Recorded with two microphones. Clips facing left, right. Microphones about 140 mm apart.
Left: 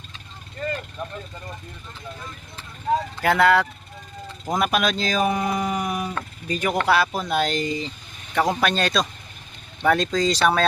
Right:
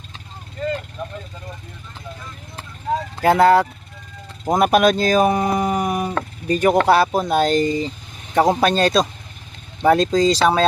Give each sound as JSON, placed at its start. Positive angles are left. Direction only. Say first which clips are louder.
{"t": 3.2, "sound": "speech", "louder": "right 6 dB", "side_deg": -35}